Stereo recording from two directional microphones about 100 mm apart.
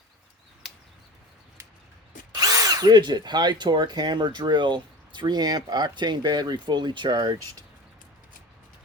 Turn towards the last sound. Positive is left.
turn(degrees=-50)  # may be behind; listen again after turning